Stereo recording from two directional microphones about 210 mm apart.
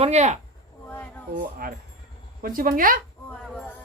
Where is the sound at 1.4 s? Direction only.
45° right (ahead or behind).